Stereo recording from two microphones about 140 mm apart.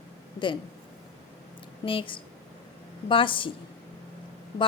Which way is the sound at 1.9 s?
40° left (ahead or behind).